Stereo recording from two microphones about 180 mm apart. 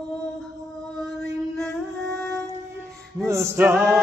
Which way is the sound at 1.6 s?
Centre (ahead or behind).